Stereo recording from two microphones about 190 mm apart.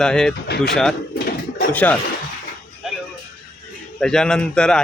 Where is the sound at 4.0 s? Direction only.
5° left (ahead or behind).